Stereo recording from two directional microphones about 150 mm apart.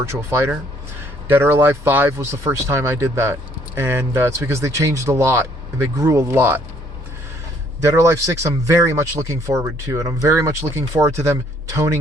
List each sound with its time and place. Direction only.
0.0 s speech: 15° right (ahead or behind)
7.8 s speech: 20° right (ahead or behind)